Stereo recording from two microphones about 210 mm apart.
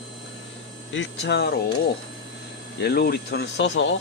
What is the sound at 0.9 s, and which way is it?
Speech, 55° left (ahead or behind).